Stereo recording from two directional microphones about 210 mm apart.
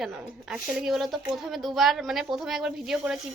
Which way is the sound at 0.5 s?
5° right (ahead or behind).